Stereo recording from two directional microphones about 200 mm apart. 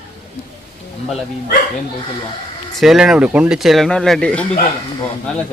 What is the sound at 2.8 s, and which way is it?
Speech, centre (ahead or behind).